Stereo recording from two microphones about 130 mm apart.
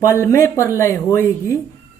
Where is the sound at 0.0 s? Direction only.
20° left (ahead or behind).